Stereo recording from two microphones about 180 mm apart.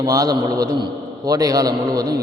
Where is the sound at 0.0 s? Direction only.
20° right (ahead or behind).